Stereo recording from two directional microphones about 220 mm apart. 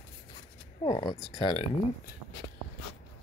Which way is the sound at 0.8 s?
20° left (ahead or behind).